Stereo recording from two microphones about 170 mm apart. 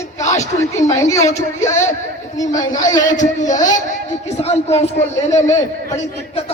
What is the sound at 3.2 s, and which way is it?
Speech, 45° left (ahead or behind).